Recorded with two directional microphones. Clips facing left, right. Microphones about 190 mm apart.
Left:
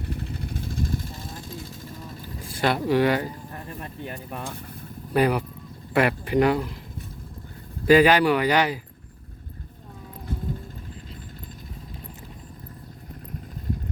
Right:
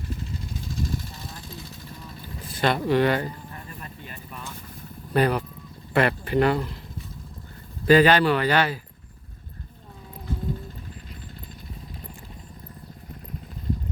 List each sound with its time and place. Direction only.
0.0 s vehicle: 60° left (ahead or behind)
2.2 s speech: 10° left (ahead or behind)
3.5 s a sound: 50° left (ahead or behind)
5.1 s speech: 10° left (ahead or behind)
7.9 s speech: 10° left (ahead or behind)